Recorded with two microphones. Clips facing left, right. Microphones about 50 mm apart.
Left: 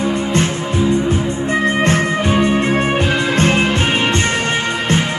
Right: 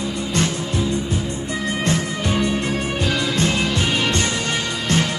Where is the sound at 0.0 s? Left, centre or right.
Left.